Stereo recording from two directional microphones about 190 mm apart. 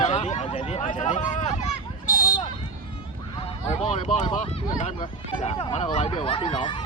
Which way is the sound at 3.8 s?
35° left (ahead or behind).